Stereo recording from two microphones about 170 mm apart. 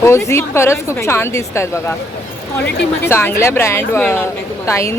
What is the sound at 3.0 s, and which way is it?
A woman's voice, 15° left (ahead or behind).